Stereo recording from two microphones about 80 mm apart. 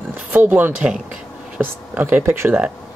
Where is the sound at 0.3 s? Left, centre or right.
Right.